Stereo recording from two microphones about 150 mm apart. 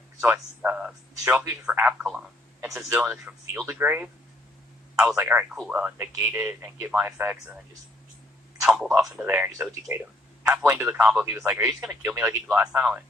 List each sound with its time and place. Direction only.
0.2 s speech: 10° right (ahead or behind)
5.1 s speech: 15° right (ahead or behind)
8.6 s speech: 5° right (ahead or behind)
11.3 s speech: 20° right (ahead or behind)